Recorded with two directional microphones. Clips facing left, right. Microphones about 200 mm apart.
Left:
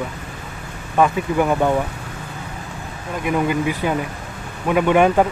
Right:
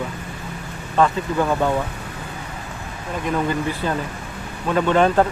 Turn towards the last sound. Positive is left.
turn(degrees=10)  # may be behind; listen again after turning